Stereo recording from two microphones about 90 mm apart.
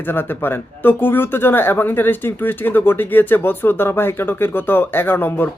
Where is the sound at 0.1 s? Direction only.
25° left (ahead or behind).